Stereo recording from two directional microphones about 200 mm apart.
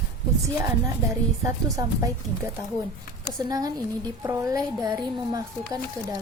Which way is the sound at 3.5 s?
20° right (ahead or behind).